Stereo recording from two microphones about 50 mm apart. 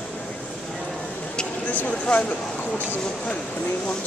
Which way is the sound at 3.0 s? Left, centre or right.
Centre.